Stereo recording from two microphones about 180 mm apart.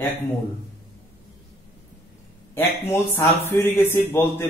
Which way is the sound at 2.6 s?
15° left (ahead or behind).